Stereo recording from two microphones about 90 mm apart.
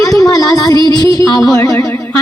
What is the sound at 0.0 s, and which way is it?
Music, 40° left (ahead or behind).